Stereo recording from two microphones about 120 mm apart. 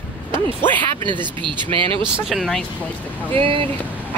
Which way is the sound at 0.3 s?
20° left (ahead or behind).